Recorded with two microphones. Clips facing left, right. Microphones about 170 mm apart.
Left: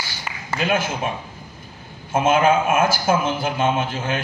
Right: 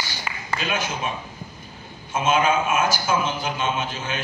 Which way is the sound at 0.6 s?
55° left (ahead or behind).